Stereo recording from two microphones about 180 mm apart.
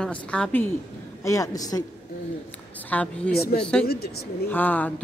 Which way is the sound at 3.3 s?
60° left (ahead or behind).